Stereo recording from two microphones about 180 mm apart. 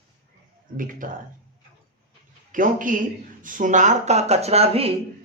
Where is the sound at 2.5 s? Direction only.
50° right (ahead or behind).